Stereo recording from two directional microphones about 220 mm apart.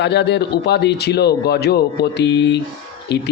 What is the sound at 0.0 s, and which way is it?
Speech, 50° left (ahead or behind).